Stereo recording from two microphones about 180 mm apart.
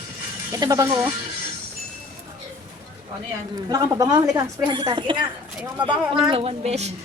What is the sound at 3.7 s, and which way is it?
Speech, 20° right (ahead or behind).